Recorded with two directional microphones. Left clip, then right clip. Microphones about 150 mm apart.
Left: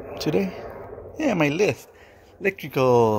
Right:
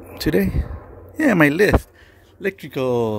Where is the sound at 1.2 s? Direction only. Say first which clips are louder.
Right 6 dB; 90° right.